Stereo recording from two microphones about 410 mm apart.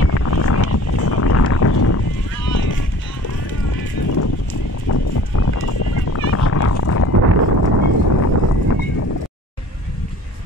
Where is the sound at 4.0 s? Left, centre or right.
Left.